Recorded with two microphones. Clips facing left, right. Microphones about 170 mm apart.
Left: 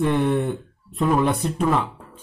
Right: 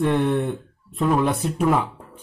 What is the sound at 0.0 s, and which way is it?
Speech, centre (ahead or behind).